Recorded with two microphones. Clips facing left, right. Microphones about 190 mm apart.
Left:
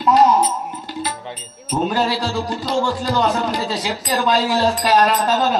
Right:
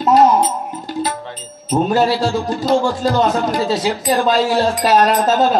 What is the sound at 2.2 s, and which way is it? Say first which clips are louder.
A man's voice: right 5 dB; 50° right (ahead or behind).